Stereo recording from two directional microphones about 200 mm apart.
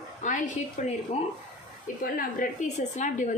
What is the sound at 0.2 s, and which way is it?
Speech, 40° left (ahead or behind).